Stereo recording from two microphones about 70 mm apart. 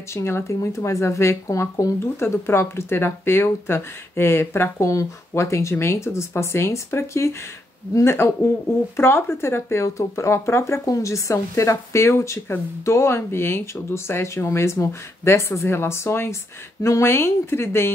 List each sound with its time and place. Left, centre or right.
0.1 s speech: left
2.2 s speech: left
4.7 s speech: left